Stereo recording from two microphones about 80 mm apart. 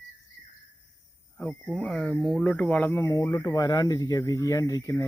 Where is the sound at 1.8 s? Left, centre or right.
Centre.